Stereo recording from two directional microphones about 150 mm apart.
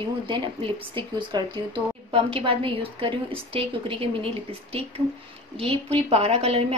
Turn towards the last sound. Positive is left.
turn(degrees=-45)  # may be behind; listen again after turning